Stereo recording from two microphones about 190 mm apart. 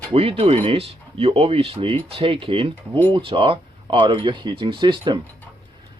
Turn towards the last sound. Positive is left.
turn(degrees=-25)  # may be behind; listen again after turning